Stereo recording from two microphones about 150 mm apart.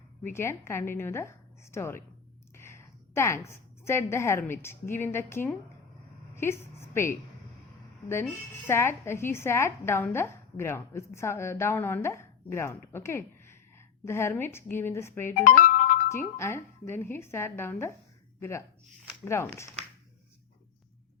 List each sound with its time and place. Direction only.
0.2 s a woman's voice: 15° left (ahead or behind)
8.6 s a woman's voice: 15° left (ahead or behind)
15.4 s music: 60° left (ahead or behind)
16.0 s a woman's voice: 15° left (ahead or behind)